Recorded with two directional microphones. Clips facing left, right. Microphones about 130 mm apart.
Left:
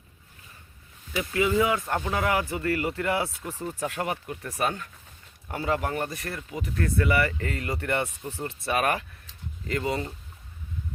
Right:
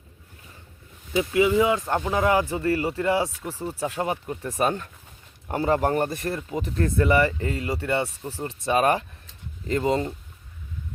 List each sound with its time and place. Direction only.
1.1 s speech: 20° right (ahead or behind)
4.6 s speech: 35° right (ahead or behind)
6.2 s speech: 25° right (ahead or behind)
8.7 s speech: 30° right (ahead or behind)